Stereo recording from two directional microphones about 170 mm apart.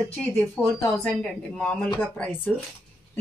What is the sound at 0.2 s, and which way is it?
A woman's voice, 10° left (ahead or behind).